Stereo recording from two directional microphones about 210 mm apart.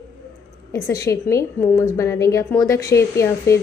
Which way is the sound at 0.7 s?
15° left (ahead or behind).